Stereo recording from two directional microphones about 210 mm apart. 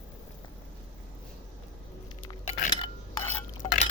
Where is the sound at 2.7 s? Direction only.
20° left (ahead or behind).